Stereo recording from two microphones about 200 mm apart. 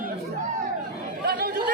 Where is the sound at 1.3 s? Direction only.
50° right (ahead or behind).